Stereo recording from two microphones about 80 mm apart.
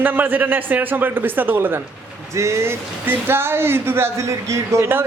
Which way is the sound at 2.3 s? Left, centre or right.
Right.